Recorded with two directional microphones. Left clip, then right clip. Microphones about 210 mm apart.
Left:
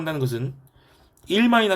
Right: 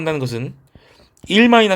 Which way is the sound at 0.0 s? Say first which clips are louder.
Right 5 dB; 35° right (ahead or behind).